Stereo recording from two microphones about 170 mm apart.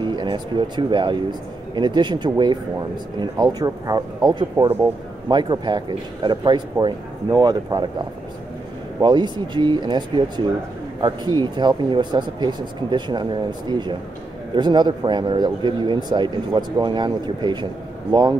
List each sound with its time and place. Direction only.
0.0 s speech: 25° right (ahead or behind)
9.0 s speech: 25° right (ahead or behind)